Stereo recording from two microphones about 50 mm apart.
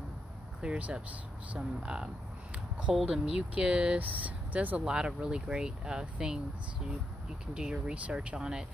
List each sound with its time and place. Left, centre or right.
0.6 s speech: right
2.9 s speech: centre
3.3 s speech: centre
4.8 s speech: centre
7.5 s speech: centre